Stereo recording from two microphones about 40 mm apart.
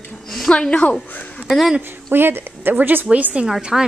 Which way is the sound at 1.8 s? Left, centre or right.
Right.